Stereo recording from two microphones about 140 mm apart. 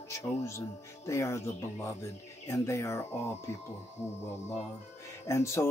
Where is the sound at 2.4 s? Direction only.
20° left (ahead or behind).